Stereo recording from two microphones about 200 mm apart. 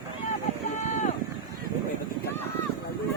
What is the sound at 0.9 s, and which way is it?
Run, 35° left (ahead or behind).